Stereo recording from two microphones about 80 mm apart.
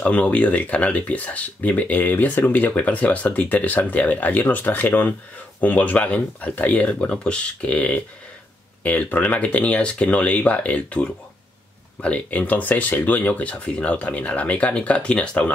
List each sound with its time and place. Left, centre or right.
0.0 s speech: centre